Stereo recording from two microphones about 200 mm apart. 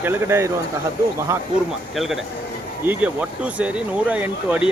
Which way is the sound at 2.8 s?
10° right (ahead or behind).